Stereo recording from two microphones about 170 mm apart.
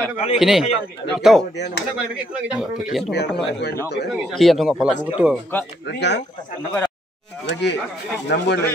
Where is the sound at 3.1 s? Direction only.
75° left (ahead or behind).